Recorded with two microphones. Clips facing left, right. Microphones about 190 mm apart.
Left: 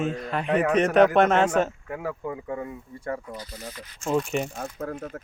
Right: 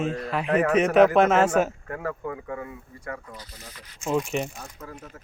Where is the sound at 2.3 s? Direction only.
20° left (ahead or behind).